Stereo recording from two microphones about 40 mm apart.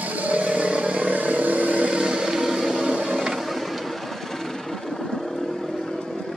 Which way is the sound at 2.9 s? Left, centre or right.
Right.